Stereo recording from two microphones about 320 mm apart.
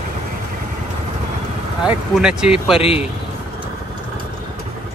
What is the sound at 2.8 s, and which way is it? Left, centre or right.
Speech, centre.